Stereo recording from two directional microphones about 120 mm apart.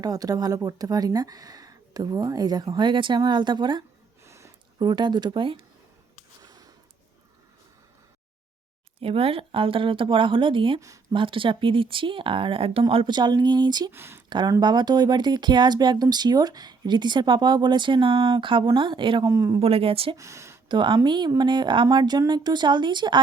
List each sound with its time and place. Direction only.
0.0 s speech: 30° right (ahead or behind)
4.2 s a sound: 25° right (ahead or behind)
4.9 s speech: 40° right (ahead or behind)
6.4 s a sound: 30° right (ahead or behind)
9.0 s speech: 55° right (ahead or behind)
10.8 s speech: 25° right (ahead or behind)
11.1 s speech: 45° right (ahead or behind)
13.9 s speech: 20° right (ahead or behind)
14.3 s speech: 40° right (ahead or behind)
19.2 s speech: 30° right (ahead or behind)
19.5 s speech: 55° right (ahead or behind)
20.1 s speech: 25° right (ahead or behind)
20.7 s speech: 40° right (ahead or behind)